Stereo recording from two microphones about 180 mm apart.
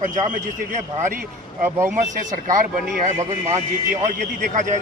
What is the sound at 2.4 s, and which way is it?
Speech, 45° right (ahead or behind).